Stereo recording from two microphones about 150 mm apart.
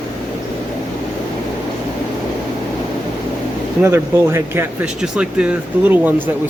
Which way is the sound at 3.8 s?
15° right (ahead or behind).